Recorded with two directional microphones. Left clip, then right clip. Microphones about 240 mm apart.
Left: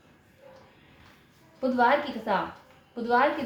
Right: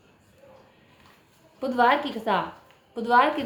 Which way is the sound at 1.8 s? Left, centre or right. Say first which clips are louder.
Right 3 dB; right.